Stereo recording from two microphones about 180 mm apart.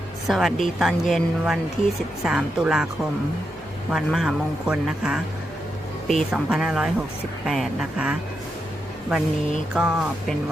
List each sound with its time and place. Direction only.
0.3 s speech: centre (ahead or behind)
9.7 s speech: 5° right (ahead or behind)